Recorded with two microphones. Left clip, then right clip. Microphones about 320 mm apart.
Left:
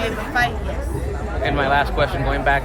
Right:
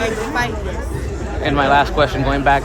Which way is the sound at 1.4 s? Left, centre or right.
Right.